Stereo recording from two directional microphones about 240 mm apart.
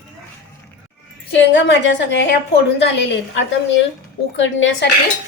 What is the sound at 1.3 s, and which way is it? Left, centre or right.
A woman's voice, left.